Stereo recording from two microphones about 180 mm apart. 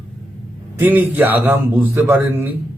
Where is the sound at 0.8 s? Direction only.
10° right (ahead or behind).